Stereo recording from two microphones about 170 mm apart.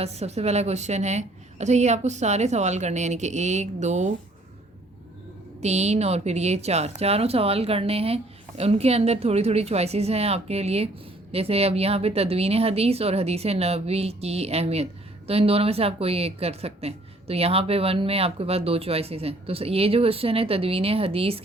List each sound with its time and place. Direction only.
0.0 s a woman's voice: 40° right (ahead or behind)
5.5 s speech: 40° right (ahead or behind)